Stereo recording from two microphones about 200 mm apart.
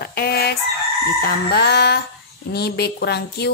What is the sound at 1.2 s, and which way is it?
A woman's voice, 55° left (ahead or behind).